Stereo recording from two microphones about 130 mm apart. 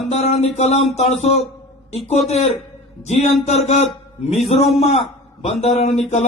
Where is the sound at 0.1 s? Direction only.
55° left (ahead or behind).